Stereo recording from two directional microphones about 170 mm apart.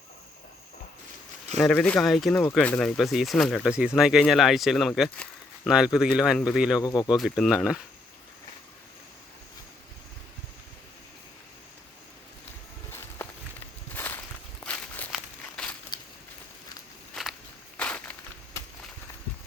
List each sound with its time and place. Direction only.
1.5 s speech: 5° left (ahead or behind)
6.8 s speech: 25° left (ahead or behind)
7.2 s speech: centre (ahead or behind)
13.9 s walk: 10° left (ahead or behind)
15.9 s a sound: 25° left (ahead or behind)
17.2 s walk: 5° left (ahead or behind)
17.7 s a sound: 10° left (ahead or behind)